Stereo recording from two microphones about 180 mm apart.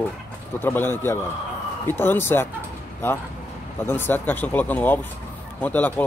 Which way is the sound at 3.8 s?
10° left (ahead or behind).